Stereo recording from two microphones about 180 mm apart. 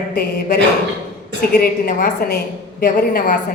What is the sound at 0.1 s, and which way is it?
A woman's voice, 55° left (ahead or behind).